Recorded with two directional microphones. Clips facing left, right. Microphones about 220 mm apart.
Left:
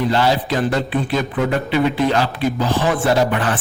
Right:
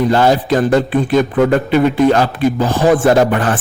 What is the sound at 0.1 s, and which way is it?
Speech, 50° right (ahead or behind).